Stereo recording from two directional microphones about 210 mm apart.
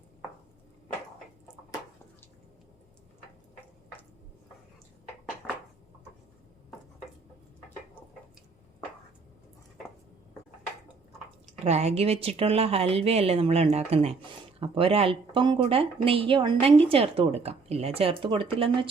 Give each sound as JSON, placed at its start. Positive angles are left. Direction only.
{"t": 11.6, "sound": "a woman's voice", "side_deg": -30}